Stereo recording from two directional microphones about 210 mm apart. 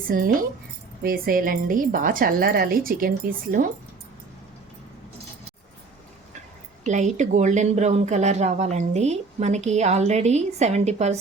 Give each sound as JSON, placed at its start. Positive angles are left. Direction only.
{"t": 0.1, "sound": "a woman's voice", "side_deg": -40}
{"t": 6.8, "sound": "speech", "side_deg": -35}